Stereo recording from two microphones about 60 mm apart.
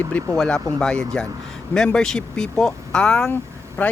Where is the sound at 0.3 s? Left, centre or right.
Centre.